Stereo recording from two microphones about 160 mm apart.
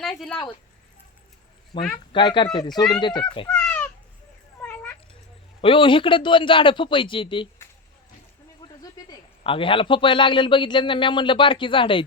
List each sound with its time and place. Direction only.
0.0 s speech: 5° left (ahead or behind)
1.7 s speech: 30° left (ahead or behind)
3.5 s a sound: 10° left (ahead or behind)
5.6 s a man's voice: 30° left (ahead or behind)
8.6 s a sound: 25° left (ahead or behind)
9.4 s a man's voice: 35° left (ahead or behind)